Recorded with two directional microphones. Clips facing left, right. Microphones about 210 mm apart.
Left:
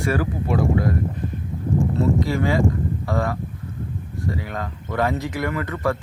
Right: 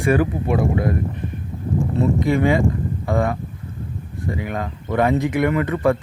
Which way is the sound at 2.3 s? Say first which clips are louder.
Right 3 dB; 20° right (ahead or behind).